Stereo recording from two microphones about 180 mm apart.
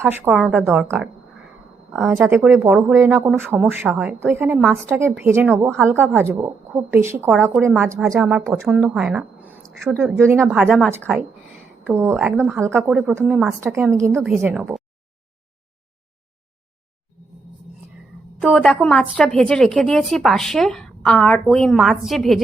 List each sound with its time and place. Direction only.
0.1 s a woman's voice: 5° right (ahead or behind)
9.7 s a woman's voice: centre (ahead or behind)
10.0 s a woman's voice: 15° right (ahead or behind)
10.5 s a woman's voice: centre (ahead or behind)
13.6 s a woman's voice: 10° right (ahead or behind)
18.4 s a woman's voice: centre (ahead or behind)